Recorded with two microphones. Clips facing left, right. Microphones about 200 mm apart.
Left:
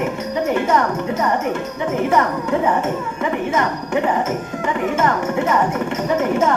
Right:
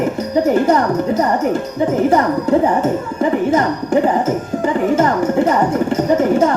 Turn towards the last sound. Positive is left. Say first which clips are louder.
# right 5 dB
turn(degrees=-35)  # may be behind; listen again after turning